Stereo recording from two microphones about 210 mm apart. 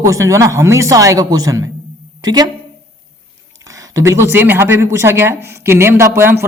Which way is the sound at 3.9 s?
15° right (ahead or behind).